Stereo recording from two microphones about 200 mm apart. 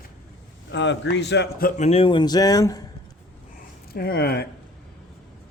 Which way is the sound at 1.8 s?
30° left (ahead or behind).